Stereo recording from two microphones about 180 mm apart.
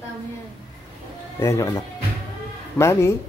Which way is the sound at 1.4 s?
15° left (ahead or behind).